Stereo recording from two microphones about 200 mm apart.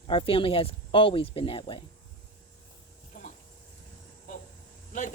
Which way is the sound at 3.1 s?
40° left (ahead or behind).